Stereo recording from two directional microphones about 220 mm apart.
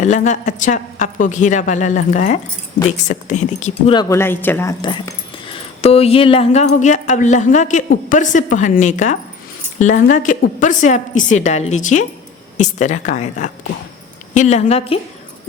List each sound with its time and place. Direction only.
0.0 s a woman's voice: 35° left (ahead or behind)
3.9 s speech: 10° left (ahead or behind)
4.8 s a woman's voice: 20° left (ahead or behind)